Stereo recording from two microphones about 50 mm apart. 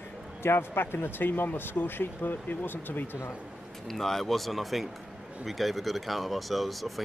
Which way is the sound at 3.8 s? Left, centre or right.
Centre.